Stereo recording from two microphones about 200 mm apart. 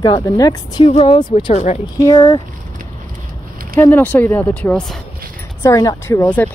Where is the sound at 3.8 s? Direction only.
10° left (ahead or behind).